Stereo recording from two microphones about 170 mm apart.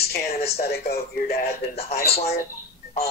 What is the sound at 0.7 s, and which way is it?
Speech, 65° left (ahead or behind).